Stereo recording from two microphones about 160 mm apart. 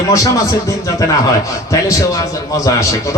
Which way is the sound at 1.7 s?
20° left (ahead or behind).